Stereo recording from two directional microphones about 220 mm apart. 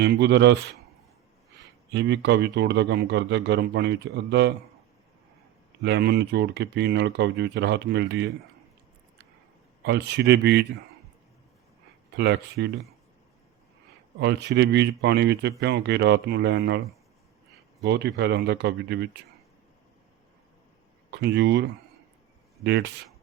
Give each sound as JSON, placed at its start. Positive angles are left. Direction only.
{"t": 0.0, "sound": "speech", "side_deg": -50}
{"t": 1.9, "sound": "speech", "side_deg": -50}
{"t": 5.8, "sound": "speech", "side_deg": -50}
{"t": 9.8, "sound": "speech", "side_deg": -50}
{"t": 12.1, "sound": "speech", "side_deg": -50}
{"t": 14.2, "sound": "speech", "side_deg": -50}
{"t": 17.8, "sound": "speech", "side_deg": -50}
{"t": 21.1, "sound": "speech", "side_deg": -50}
{"t": 22.6, "sound": "speech", "side_deg": -50}